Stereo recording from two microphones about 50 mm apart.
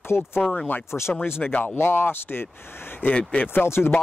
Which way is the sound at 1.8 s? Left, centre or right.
Left.